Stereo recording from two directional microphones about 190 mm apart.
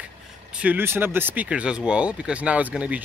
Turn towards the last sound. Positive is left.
turn(degrees=-5)  # may be behind; listen again after turning